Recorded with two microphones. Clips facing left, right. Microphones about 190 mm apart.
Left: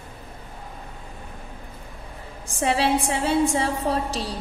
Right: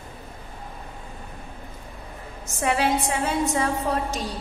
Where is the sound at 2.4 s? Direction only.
30° left (ahead or behind).